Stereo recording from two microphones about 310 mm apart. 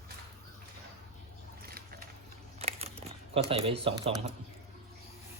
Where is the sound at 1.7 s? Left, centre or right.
Right.